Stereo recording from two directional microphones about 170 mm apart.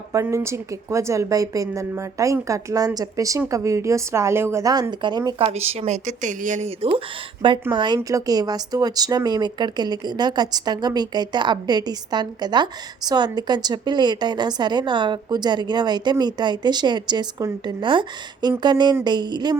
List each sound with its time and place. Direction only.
0.1 s a woman's voice: 15° right (ahead or behind)
5.5 s speech: 35° right (ahead or behind)
7.7 s a woman's voice: 25° right (ahead or behind)